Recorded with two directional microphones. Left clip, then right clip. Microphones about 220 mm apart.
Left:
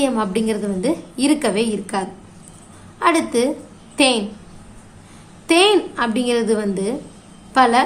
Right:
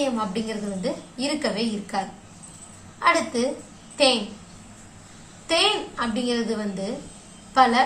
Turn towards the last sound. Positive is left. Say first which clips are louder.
# left 4 dB
turn(degrees=50)  # may be behind; listen again after turning